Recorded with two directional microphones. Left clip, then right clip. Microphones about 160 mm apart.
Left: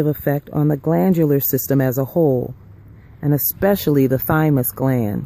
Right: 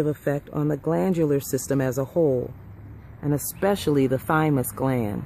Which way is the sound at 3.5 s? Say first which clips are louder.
Left 5 dB; 40° left (ahead or behind).